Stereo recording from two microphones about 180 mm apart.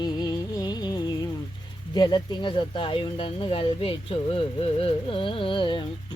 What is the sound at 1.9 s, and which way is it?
Speech, 25° left (ahead or behind).